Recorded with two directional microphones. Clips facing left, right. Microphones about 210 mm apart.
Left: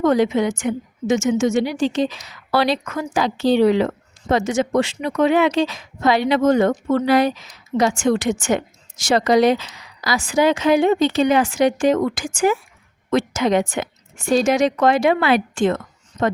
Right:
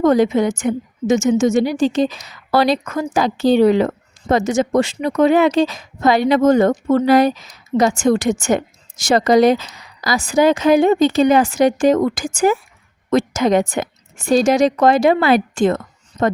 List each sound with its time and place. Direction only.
0.0 s a woman's voice: 45° right (ahead or behind)